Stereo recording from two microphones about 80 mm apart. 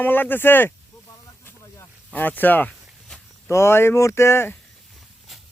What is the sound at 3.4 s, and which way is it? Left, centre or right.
Speech, left.